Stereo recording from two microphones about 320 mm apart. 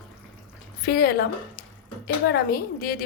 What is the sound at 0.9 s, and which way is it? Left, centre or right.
Speech, left.